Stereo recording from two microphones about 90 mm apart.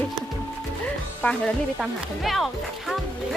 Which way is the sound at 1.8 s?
Centre (ahead or behind).